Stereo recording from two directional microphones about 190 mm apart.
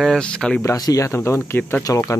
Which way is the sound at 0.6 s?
15° left (ahead or behind).